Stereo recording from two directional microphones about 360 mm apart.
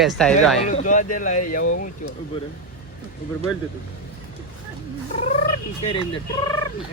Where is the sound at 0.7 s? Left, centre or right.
Left.